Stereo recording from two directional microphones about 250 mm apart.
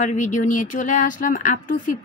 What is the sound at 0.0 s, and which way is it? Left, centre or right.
Speech, left.